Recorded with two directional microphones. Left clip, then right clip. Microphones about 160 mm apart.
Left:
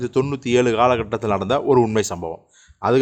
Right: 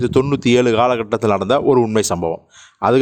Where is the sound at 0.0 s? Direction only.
40° right (ahead or behind).